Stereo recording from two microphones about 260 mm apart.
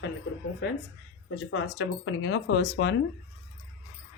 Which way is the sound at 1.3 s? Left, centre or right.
Left.